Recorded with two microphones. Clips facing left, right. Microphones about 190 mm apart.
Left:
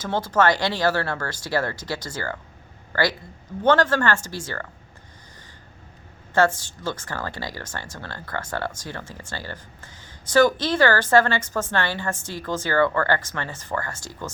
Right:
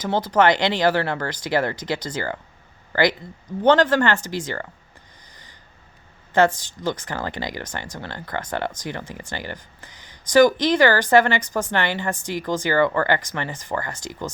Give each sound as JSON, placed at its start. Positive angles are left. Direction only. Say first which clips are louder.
{"t": 0.0, "sound": "speech", "louder": "right 2 dB", "side_deg": -15}
{"t": 6.3, "sound": "speech", "louder": "right 2 dB", "side_deg": -20}